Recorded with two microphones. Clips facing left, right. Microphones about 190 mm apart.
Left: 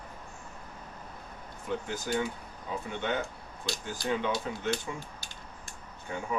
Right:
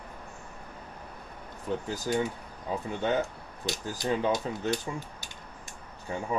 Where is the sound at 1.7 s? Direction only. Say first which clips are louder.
Right 2 dB; 35° right (ahead or behind).